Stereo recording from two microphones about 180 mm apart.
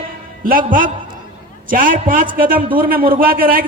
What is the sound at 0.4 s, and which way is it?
A man's voice, 50° right (ahead or behind).